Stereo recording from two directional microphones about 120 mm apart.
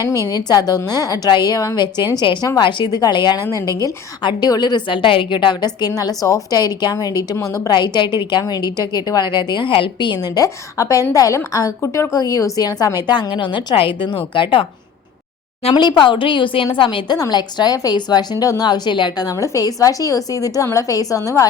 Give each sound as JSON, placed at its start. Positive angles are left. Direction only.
{"t": 0.3, "sound": "a woman's voice", "side_deg": 35}
{"t": 7.7, "sound": "a woman's voice", "side_deg": 40}
{"t": 15.7, "sound": "a woman's voice", "side_deg": 40}